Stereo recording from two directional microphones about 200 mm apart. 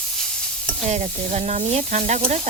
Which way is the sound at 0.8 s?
35° right (ahead or behind).